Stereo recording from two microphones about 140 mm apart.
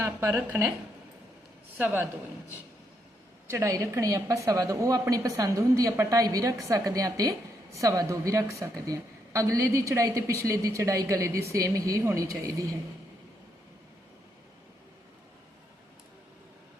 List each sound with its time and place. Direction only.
0.0 s a woman's voice: 20° right (ahead or behind)
1.8 s speech: 15° right (ahead or behind)
3.4 s a woman's voice: 20° right (ahead or behind)